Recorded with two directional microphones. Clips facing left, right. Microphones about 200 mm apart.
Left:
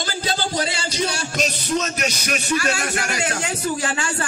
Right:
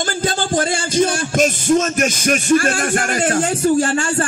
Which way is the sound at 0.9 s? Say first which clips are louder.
Right 10 dB; 50° right (ahead or behind).